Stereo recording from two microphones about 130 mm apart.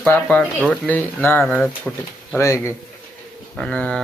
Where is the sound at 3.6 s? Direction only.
10° left (ahead or behind).